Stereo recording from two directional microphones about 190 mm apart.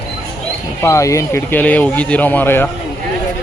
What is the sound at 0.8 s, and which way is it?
Speech, 15° left (ahead or behind).